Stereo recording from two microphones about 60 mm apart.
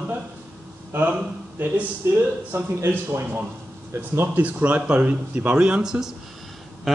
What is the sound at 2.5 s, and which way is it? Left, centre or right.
Speech, right.